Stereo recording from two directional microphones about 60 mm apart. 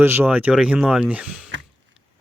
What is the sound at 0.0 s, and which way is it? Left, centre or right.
Speech, right.